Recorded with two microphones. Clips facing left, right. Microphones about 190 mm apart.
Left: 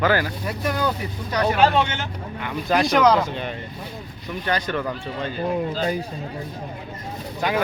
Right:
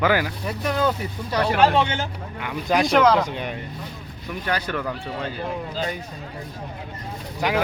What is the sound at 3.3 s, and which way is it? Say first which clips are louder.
Speech: even; 15° right (ahead or behind).